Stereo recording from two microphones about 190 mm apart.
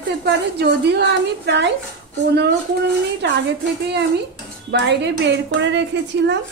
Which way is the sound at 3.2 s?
60° right (ahead or behind).